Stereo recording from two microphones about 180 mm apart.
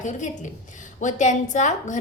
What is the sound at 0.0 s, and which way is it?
A woman's voice, 45° left (ahead or behind).